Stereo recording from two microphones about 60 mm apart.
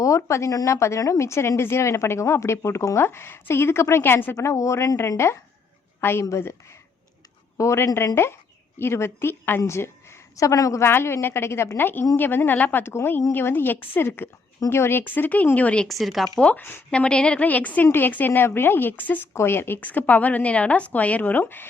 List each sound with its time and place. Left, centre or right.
0.2 s a woman's voice: left
4.4 s a woman's voice: left
7.5 s a woman's voice: left
10.3 s a woman's voice: left
10.8 s a woman's voice: left
15.9 s speech: centre
16.6 s speech: left
16.9 s speech: centre
19.3 s speech: left
19.8 s speech: left